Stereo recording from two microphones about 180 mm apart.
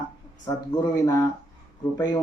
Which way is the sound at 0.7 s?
20° left (ahead or behind).